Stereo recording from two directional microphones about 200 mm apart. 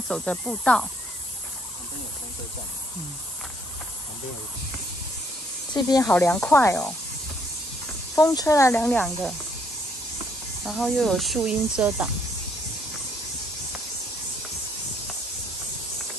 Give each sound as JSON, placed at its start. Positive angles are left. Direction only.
{"t": 0.1, "sound": "speech", "side_deg": 5}
{"t": 5.7, "sound": "speech", "side_deg": 20}
{"t": 6.0, "sound": "speech", "side_deg": 10}
{"t": 8.2, "sound": "speech", "side_deg": 15}
{"t": 10.6, "sound": "speech", "side_deg": 0}